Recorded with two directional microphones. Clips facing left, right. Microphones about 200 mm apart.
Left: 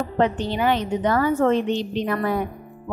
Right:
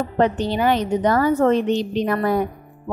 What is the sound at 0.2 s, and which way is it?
A woman's voice, 40° right (ahead or behind).